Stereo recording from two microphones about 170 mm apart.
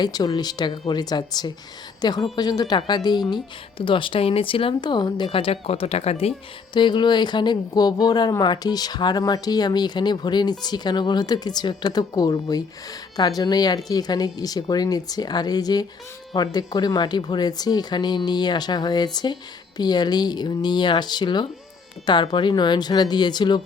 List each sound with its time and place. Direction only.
0.0 s speech: 25° left (ahead or behind)